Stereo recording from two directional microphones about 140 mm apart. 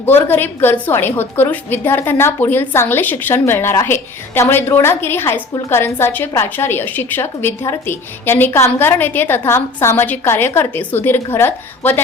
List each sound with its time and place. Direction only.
0.0 s a woman's voice: 15° left (ahead or behind)